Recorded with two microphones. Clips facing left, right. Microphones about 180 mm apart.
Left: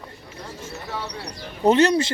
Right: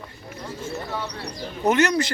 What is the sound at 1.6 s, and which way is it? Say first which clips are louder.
Speech: left 3 dB; 30° left (ahead or behind).